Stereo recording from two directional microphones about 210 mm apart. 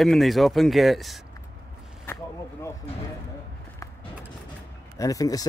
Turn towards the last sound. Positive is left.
turn(degrees=15)  # may be behind; listen again after turning